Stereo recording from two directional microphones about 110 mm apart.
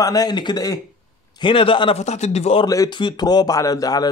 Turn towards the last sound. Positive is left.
turn(degrees=35)  # may be behind; listen again after turning